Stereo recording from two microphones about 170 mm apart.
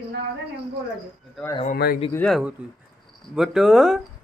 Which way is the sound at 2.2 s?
Centre (ahead or behind).